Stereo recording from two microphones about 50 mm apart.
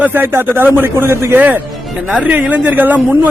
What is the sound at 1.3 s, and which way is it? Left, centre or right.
A man's voice, right.